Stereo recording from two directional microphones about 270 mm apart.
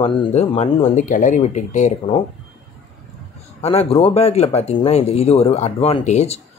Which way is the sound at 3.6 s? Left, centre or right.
Left.